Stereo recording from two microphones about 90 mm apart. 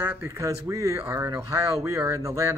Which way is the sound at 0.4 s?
35° right (ahead or behind).